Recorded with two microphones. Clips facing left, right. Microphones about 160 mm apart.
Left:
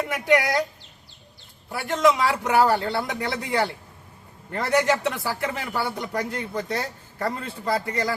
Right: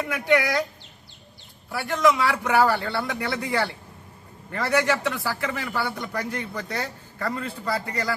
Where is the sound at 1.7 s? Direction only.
20° left (ahead or behind).